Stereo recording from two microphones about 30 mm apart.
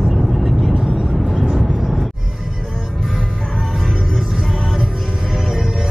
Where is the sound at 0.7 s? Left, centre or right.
Right.